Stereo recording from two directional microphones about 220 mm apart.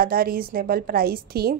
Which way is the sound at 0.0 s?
40° right (ahead or behind).